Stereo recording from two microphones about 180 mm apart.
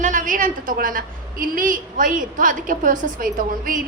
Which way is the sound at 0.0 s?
45° right (ahead or behind).